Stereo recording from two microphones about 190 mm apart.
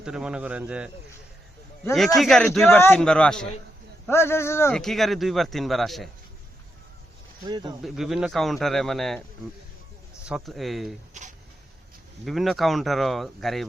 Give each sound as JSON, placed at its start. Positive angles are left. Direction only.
{"t": 0.0, "sound": "speech", "side_deg": -5}
{"t": 1.9, "sound": "speech", "side_deg": 0}
{"t": 4.7, "sound": "speech", "side_deg": 0}
{"t": 7.4, "sound": "speech", "side_deg": -20}
{"t": 7.8, "sound": "speech", "side_deg": 0}
{"t": 10.2, "sound": "speech", "side_deg": 0}
{"t": 11.1, "sound": "a sound", "side_deg": -40}
{"t": 12.2, "sound": "speech", "side_deg": 0}